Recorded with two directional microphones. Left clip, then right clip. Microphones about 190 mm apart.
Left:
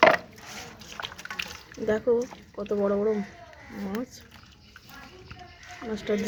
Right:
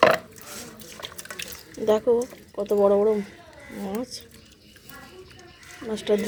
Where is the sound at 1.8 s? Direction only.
5° right (ahead or behind).